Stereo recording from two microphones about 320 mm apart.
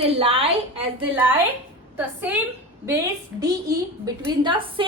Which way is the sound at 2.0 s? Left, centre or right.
Centre.